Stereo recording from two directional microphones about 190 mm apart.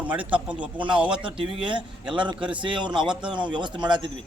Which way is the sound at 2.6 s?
25° right (ahead or behind).